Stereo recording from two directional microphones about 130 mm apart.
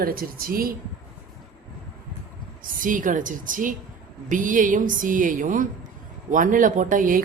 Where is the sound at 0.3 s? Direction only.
90° right.